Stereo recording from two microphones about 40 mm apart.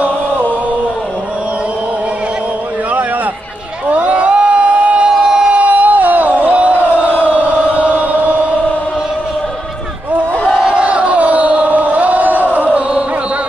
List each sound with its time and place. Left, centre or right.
3.9 s crowd: right
5.1 s a sound: centre
5.6 s crowd: right
7.3 s chant: left
10.7 s crowd: right